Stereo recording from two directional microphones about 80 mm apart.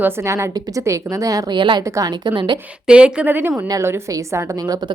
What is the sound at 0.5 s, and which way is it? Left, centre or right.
Speech, right.